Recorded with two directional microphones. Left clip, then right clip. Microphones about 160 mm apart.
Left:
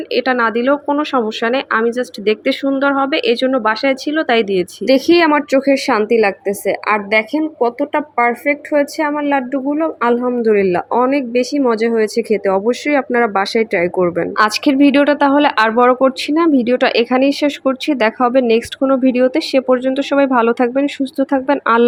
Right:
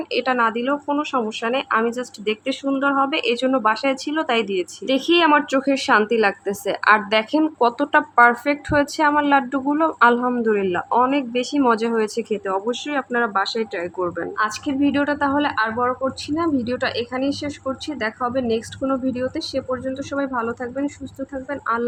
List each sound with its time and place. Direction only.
0.1 s speech: 20° left (ahead or behind)
14.3 s speech: 45° left (ahead or behind)